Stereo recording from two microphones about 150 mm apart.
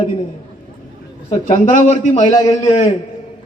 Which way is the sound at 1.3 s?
60° left (ahead or behind).